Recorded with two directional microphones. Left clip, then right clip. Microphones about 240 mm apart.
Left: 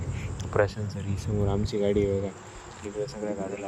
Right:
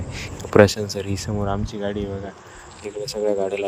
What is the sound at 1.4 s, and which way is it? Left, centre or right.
Speech, centre.